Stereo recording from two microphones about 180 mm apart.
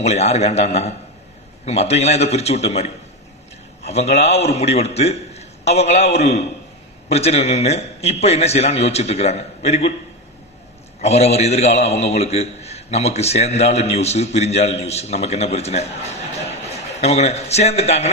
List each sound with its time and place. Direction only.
0.0 s a man's voice: 35° left (ahead or behind)
11.0 s a man's voice: 35° left (ahead or behind)